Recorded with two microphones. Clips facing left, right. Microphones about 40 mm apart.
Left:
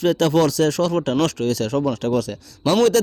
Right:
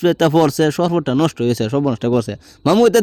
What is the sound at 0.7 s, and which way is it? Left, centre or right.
Speech, right.